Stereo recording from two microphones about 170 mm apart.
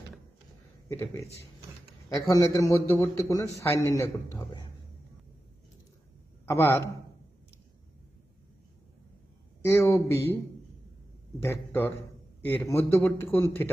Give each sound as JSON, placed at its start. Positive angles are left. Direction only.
{"t": 2.2, "sound": "a man's voice", "side_deg": 20}
{"t": 6.4, "sound": "a man's voice", "side_deg": 15}
{"t": 9.6, "sound": "a man's voice", "side_deg": 15}
{"t": 11.4, "sound": "a man's voice", "side_deg": 15}